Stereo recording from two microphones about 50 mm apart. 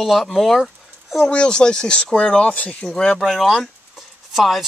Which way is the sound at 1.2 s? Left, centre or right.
Centre.